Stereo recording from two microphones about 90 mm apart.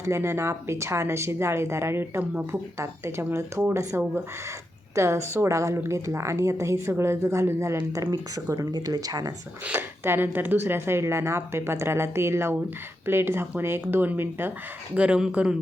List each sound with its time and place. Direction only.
0.0 s a woman's voice: 30° right (ahead or behind)
8.1 s speech: 45° right (ahead or behind)
9.7 s speech: 25° right (ahead or behind)
14.9 s speech: 10° right (ahead or behind)